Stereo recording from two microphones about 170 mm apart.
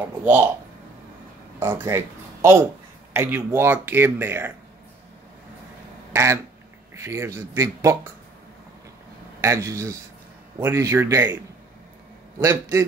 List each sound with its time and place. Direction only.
0.2 s speech: 10° right (ahead or behind)
1.6 s speech: 15° right (ahead or behind)
6.1 s speech: 15° right (ahead or behind)
9.4 s speech: 15° right (ahead or behind)
12.4 s speech: 15° right (ahead or behind)